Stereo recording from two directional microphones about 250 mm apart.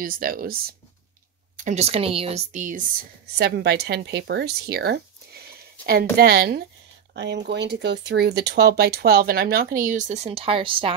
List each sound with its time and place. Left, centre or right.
0.0 s speech: right
1.6 s speech: right